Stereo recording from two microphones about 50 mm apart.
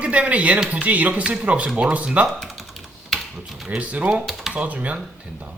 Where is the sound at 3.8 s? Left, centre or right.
Right.